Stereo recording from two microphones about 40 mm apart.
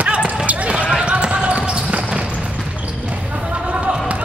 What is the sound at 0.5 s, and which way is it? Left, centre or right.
Basketball bounce, right.